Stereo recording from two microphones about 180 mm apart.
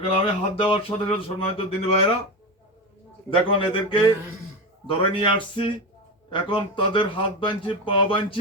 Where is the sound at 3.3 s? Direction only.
30° left (ahead or behind).